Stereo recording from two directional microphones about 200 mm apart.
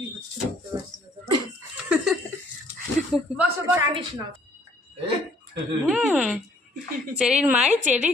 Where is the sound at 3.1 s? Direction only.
5° right (ahead or behind).